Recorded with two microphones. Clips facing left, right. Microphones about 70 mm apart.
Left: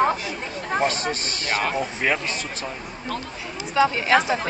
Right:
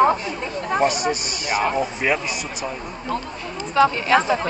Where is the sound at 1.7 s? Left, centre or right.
Centre.